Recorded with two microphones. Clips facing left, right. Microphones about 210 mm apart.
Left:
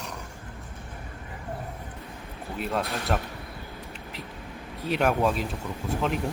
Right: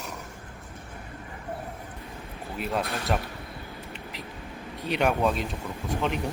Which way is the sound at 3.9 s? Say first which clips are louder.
Even; centre (ahead or behind).